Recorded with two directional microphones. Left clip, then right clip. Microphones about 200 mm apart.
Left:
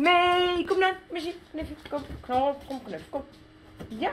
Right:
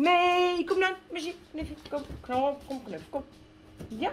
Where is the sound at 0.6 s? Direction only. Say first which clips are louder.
Left 3 dB; 20° left (ahead or behind).